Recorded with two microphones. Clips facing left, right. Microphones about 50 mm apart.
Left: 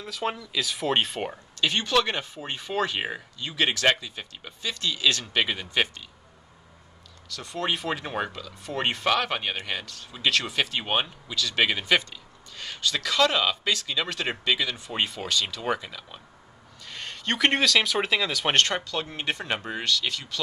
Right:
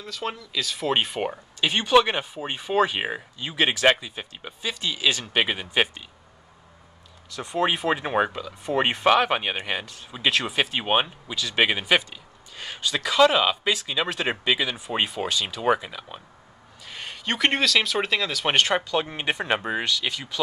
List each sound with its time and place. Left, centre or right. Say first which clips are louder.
0.0 s speech: left 1 dB; centre
7.2 s speech: right 5 dB; centre
18.6 s speech: right 3 dB; centre